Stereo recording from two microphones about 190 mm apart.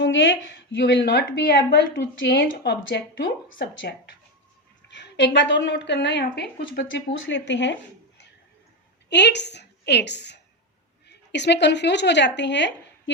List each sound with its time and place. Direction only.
0.0 s a woman's voice: 70° left (ahead or behind)
9.0 s a woman's voice: 65° left (ahead or behind)